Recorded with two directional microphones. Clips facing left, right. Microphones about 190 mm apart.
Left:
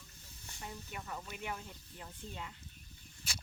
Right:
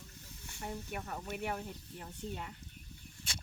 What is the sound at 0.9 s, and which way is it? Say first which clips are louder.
Speech: right 4 dB; 50° right (ahead or behind).